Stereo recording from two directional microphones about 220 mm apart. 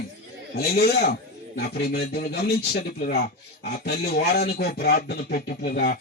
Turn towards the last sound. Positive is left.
turn(degrees=45)  # may be behind; listen again after turning